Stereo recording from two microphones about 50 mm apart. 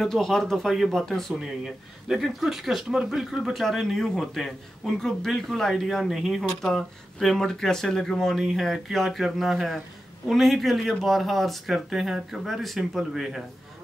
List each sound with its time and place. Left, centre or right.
0.0 s speech: centre
1.4 s speech: centre
3.5 s speech: centre
6.6 s speech: centre